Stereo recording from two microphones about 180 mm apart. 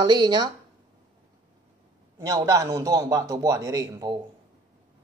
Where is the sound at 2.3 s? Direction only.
20° right (ahead or behind).